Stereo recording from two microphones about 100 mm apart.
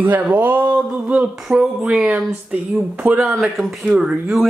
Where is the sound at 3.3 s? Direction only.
Centre (ahead or behind).